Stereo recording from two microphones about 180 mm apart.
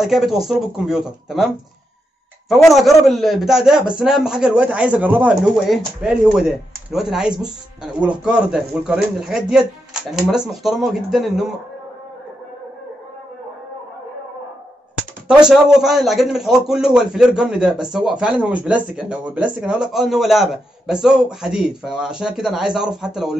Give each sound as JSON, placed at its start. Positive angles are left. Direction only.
{"t": 0.0, "sound": "a man's voice", "side_deg": 0}
{"t": 2.5, "sound": "a man's voice", "side_deg": 0}
{"t": 15.2, "sound": "a man's voice", "side_deg": -5}